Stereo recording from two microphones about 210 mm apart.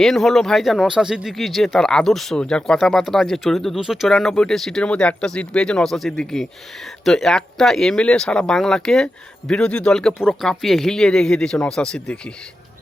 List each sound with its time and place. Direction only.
0.0 s speech: centre (ahead or behind)